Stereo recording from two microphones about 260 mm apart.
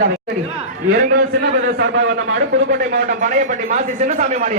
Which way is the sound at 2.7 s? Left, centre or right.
Right.